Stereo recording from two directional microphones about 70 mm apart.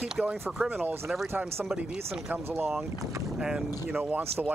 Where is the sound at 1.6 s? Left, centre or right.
Centre.